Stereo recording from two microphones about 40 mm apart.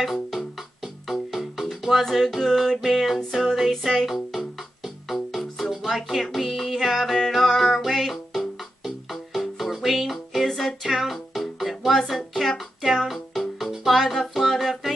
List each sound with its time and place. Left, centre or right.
0.0 s music: centre